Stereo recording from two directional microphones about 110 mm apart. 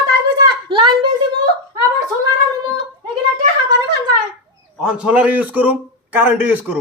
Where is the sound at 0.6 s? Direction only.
50° right (ahead or behind).